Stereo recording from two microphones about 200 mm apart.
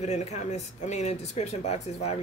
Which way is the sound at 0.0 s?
35° left (ahead or behind).